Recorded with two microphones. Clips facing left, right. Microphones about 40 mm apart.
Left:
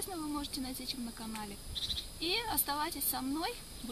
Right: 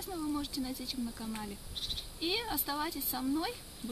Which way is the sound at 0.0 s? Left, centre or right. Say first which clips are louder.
Right 2 dB; centre.